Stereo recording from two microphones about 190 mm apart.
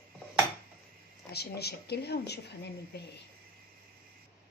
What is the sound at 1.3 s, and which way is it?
A woman's voice, 55° left (ahead or behind).